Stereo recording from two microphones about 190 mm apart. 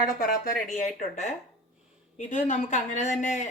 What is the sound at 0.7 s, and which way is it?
Speech, 40° left (ahead or behind).